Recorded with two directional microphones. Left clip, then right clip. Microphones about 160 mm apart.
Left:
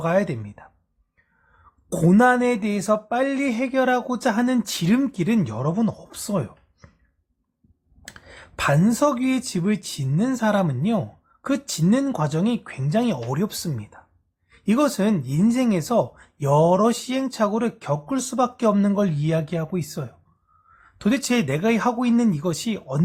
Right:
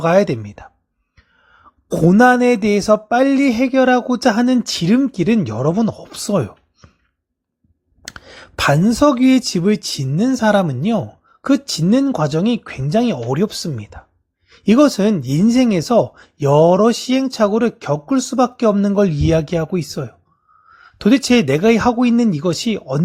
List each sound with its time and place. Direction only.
0.0 s speech: 35° right (ahead or behind)
1.9 s speech: 25° right (ahead or behind)
8.0 s speech: 35° right (ahead or behind)